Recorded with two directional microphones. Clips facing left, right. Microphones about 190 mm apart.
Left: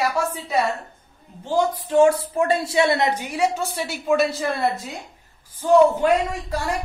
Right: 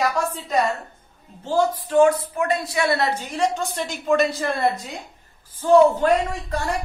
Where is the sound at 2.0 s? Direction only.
30° left (ahead or behind).